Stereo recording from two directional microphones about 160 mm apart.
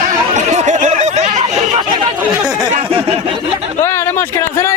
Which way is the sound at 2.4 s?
25° right (ahead or behind).